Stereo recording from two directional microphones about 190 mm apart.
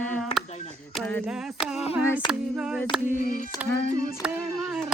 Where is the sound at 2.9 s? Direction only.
5° right (ahead or behind).